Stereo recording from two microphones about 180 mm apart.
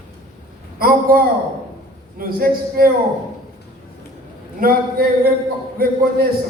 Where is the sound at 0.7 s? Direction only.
55° right (ahead or behind).